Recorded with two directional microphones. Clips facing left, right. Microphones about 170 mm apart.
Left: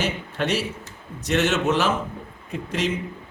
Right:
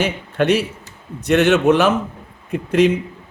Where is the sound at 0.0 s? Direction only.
60° right (ahead or behind).